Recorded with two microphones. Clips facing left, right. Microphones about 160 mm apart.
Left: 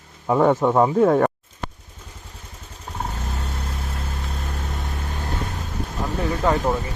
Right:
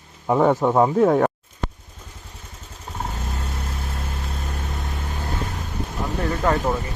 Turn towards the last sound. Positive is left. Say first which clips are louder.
# left 1 dB
turn(degrees=10)  # may be behind; listen again after turning